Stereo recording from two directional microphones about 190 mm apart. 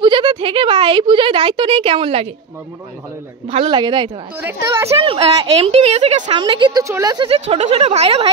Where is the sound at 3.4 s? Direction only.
25° right (ahead or behind).